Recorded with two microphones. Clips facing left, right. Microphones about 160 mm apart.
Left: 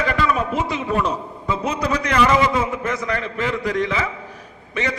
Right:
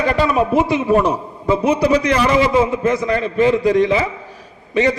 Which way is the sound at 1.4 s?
30° right (ahead or behind).